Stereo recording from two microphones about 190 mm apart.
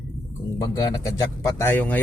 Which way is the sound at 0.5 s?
20° left (ahead or behind).